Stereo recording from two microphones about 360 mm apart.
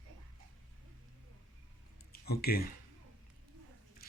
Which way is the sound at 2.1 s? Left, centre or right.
Left.